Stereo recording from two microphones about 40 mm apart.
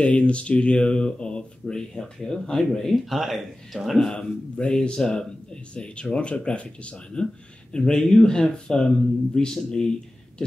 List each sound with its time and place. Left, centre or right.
0.0 s speech: left; by 3.0 s centre
3.1 s speech: centre
4.0 s speech: left
7.7 s speech: centre